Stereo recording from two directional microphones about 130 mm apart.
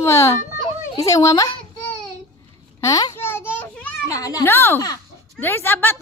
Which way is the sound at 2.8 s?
25° left (ahead or behind).